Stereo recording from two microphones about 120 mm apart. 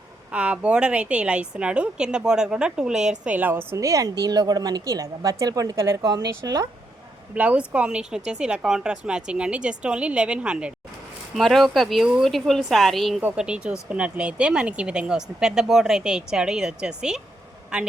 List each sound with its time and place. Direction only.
0.3 s a woman's voice: 10° right (ahead or behind); by 6.7 s 30° right (ahead or behind)
7.3 s a woman's voice: 10° right (ahead or behind)